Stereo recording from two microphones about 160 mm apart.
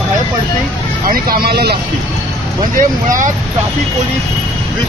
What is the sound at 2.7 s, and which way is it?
Speech, 55° right (ahead or behind).